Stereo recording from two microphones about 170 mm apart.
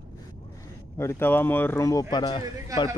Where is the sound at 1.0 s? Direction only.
15° left (ahead or behind).